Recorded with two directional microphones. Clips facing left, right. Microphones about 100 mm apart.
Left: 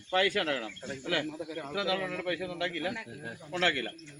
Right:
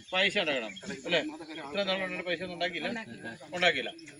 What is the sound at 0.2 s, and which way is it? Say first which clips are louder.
A man's voice: left 1 dB; 25° left (ahead or behind).